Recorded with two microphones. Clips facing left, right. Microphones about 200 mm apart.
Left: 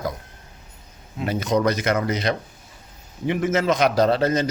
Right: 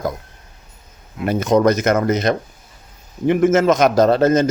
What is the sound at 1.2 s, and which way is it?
Speech, 50° right (ahead or behind).